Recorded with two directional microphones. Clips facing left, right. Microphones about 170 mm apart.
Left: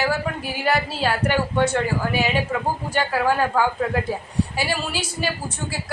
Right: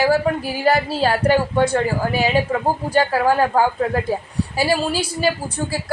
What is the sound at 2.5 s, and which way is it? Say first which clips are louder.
A woman's voice: right 5 dB; 40° right (ahead or behind).